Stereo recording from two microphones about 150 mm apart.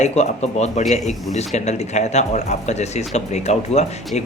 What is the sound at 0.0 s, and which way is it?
Speech, 50° left (ahead or behind).